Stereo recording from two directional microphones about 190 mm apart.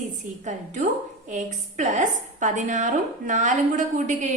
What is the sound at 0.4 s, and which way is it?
A woman's voice, 40° right (ahead or behind).